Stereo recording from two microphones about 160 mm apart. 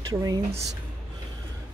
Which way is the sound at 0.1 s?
20° right (ahead or behind).